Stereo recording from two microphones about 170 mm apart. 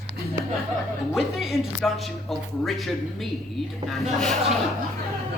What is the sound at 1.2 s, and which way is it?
Speech, centre (ahead or behind).